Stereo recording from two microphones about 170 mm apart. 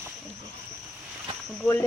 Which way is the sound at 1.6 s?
15° left (ahead or behind).